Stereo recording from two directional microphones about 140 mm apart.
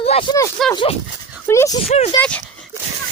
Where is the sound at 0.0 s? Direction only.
45° left (ahead or behind).